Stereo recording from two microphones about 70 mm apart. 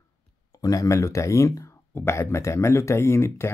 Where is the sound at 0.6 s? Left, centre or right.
Left.